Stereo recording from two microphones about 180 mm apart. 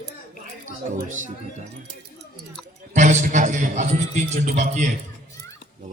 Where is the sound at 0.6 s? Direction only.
45° right (ahead or behind).